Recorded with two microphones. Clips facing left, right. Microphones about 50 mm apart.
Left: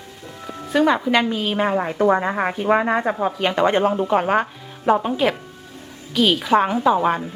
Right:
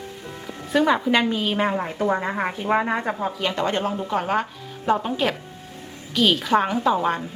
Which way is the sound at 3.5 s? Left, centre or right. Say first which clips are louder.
Left 8 dB; left.